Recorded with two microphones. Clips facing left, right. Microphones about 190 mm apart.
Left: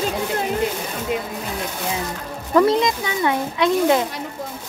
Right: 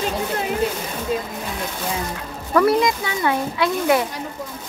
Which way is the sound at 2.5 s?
20° left (ahead or behind).